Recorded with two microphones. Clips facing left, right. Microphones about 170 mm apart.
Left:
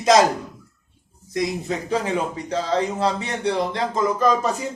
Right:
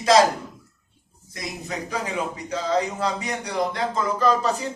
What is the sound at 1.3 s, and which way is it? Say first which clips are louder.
A man's voice: left 8 dB; 25° left (ahead or behind).